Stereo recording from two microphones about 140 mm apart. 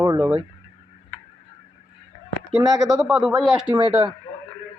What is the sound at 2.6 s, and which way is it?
Speech, 25° right (ahead or behind).